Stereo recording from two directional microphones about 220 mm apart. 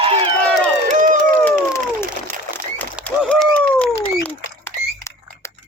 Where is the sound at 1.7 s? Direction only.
10° left (ahead or behind).